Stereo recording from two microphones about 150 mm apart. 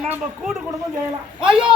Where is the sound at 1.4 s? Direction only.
5° right (ahead or behind).